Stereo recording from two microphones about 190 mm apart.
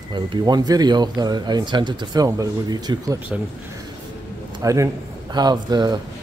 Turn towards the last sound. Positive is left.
turn(degrees=-20)  # may be behind; listen again after turning